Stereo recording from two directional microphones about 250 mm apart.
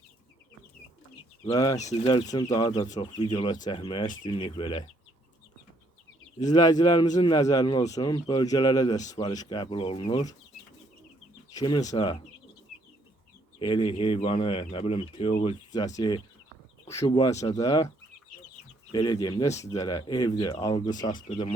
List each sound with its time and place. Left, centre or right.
1.5 s speech: centre
6.4 s speech: centre
11.5 s speech: centre
13.6 s speech: centre
21.0 s speech: left